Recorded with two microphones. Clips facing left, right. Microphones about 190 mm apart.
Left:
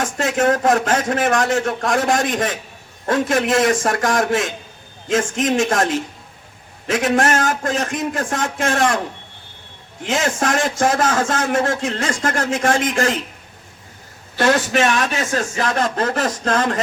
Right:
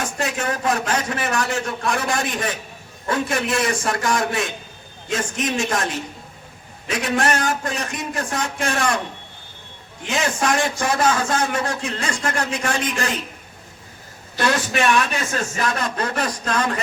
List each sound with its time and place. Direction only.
0.2 s a man's voice: 50° left (ahead or behind)
10.1 s a man's voice: 50° left (ahead or behind)
14.4 s a man's voice: 45° left (ahead or behind)